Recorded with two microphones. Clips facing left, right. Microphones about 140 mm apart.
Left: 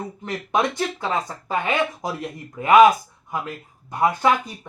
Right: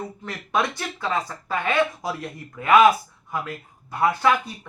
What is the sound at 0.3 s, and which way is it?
Speech, 20° left (ahead or behind).